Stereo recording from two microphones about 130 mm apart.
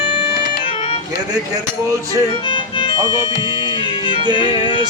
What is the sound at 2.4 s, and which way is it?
Music, 40° left (ahead or behind).